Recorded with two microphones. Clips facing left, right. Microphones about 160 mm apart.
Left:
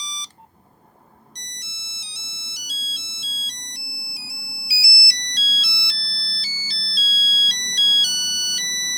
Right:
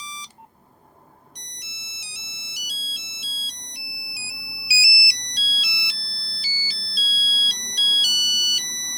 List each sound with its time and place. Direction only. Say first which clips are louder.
1.5 s ringtone: even; 10° right (ahead or behind)